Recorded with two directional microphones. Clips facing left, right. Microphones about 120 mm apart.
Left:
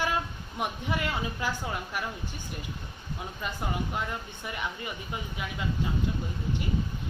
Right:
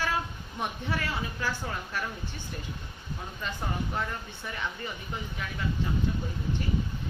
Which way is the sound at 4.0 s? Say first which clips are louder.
Even; 15° left (ahead or behind).